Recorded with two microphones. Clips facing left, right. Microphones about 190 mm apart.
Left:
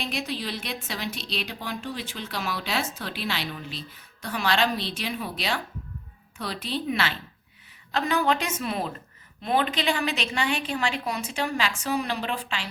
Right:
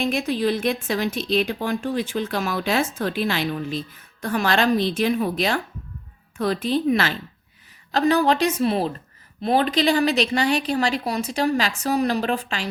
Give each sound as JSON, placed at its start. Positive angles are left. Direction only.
{"t": 0.0, "sound": "a woman's voice", "side_deg": -50}